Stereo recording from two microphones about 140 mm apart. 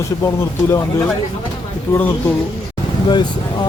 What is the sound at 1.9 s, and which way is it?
Speech, 15° left (ahead or behind).